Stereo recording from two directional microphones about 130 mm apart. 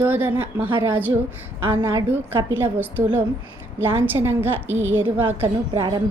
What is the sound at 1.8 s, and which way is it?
A woman's voice, 20° right (ahead or behind).